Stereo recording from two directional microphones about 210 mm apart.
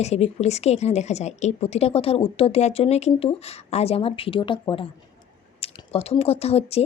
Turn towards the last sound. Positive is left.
turn(degrees=30)  # may be behind; listen again after turning